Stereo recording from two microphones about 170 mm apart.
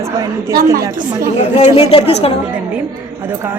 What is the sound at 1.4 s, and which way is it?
Speech, 40° left (ahead or behind).